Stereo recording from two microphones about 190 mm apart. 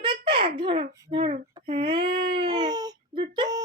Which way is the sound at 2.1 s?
50° right (ahead or behind).